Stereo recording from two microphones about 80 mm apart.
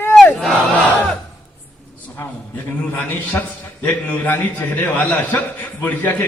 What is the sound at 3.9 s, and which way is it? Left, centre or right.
A man's voice, left.